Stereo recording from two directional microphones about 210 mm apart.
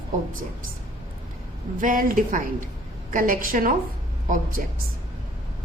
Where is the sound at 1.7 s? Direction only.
40° right (ahead or behind).